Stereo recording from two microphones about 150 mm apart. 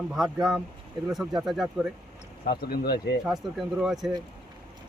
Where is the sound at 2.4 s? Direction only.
90° left.